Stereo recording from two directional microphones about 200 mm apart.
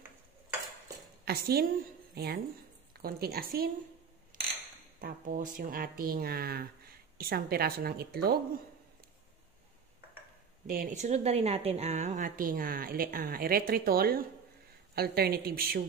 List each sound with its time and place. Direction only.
1.2 s a woman's voice: 50° right (ahead or behind)
5.0 s speech: 45° right (ahead or behind)
10.7 s speech: 40° right (ahead or behind)